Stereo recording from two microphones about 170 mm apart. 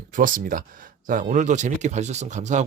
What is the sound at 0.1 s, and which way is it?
Speech, 55° right (ahead or behind).